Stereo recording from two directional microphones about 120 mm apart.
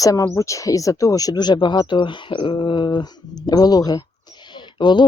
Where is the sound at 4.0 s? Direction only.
35° left (ahead or behind).